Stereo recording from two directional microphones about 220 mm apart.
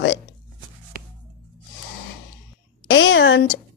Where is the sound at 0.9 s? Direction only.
40° right (ahead or behind).